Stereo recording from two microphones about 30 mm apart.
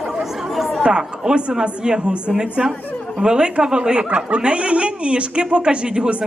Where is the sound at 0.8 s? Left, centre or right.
Right.